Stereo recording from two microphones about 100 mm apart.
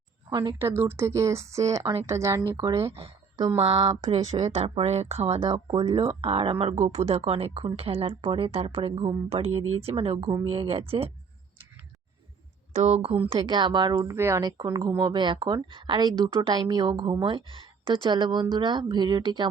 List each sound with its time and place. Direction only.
0.3 s speech: 50° right (ahead or behind)
0.6 s speech: 25° right (ahead or behind)
2.9 s a sound: 75° right (ahead or behind)
3.6 s a woman's voice: 80° right
4.1 s speech: 90° right
5.5 s speech: 55° right (ahead or behind); by 9.0 s 70° right (ahead or behind)
9.3 s speech: 90° right
10.5 s speech: 70° right (ahead or behind)
12.8 s a woman's voice: 85° right
13.5 s speech: 50° right (ahead or behind)
14.2 s speech: 25° right (ahead or behind)
14.4 s speech: 45° right (ahead or behind)